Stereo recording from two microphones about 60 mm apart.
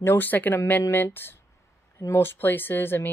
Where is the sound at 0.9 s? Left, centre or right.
Left.